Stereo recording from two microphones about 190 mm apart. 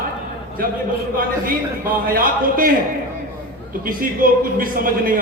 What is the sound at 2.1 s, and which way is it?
Speech, 50° right (ahead or behind).